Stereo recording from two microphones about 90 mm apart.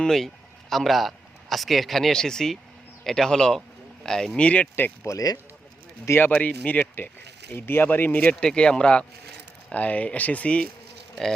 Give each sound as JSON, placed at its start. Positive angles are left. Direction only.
{"t": 0.0, "sound": "speech", "side_deg": 5}
{"t": 5.0, "sound": "speech", "side_deg": 40}
{"t": 6.1, "sound": "speech", "side_deg": 20}